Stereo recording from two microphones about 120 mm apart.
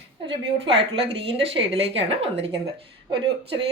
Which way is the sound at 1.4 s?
55° right (ahead or behind).